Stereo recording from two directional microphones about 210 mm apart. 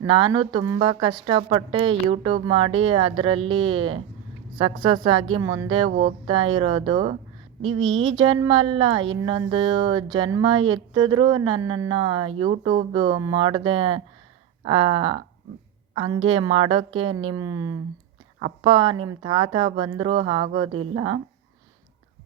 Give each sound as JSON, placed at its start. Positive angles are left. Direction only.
{"t": 0.3, "sound": "speech", "side_deg": -20}
{"t": 16.2, "sound": "a woman's voice", "side_deg": -25}